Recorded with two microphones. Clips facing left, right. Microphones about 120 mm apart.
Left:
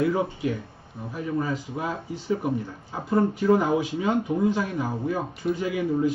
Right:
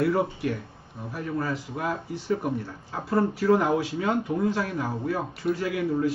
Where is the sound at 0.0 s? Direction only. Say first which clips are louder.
Even; centre (ahead or behind).